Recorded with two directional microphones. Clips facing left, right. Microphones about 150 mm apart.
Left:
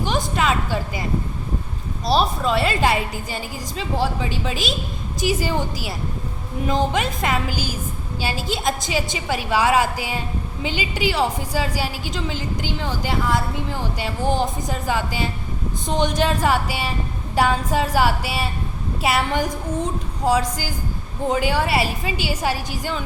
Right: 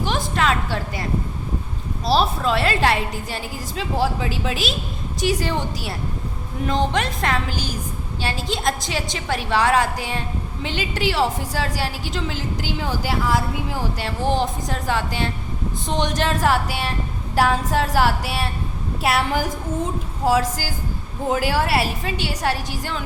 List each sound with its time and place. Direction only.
0.0 s a woman's voice: centre (ahead or behind)
2.0 s a woman's voice: centre (ahead or behind)